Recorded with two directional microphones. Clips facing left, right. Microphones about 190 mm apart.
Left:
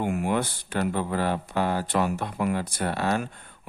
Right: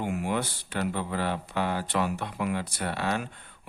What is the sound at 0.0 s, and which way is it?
Speech, 50° left (ahead or behind).